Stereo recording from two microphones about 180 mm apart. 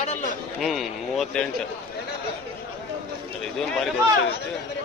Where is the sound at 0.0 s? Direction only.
40° left (ahead or behind).